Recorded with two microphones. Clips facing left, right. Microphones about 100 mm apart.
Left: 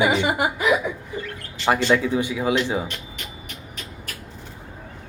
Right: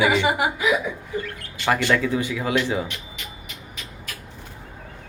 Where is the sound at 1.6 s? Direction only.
20° left (ahead or behind).